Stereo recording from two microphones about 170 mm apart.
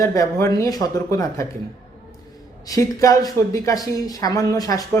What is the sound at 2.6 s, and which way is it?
Speech, 20° left (ahead or behind).